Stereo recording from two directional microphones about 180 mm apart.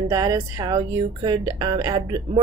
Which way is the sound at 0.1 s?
20° right (ahead or behind).